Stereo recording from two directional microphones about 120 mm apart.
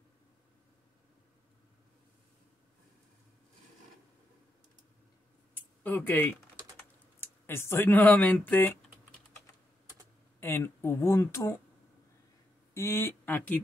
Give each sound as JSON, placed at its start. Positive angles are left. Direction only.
{"t": 5.9, "sound": "speech", "side_deg": 15}
{"t": 10.4, "sound": "speech", "side_deg": 20}
{"t": 12.7, "sound": "speech", "side_deg": 20}